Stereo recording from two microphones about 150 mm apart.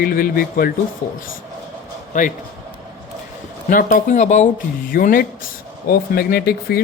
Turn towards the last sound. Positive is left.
turn(degrees=90)